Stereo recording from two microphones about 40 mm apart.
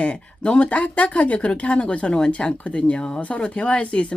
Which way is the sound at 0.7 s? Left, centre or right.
Left.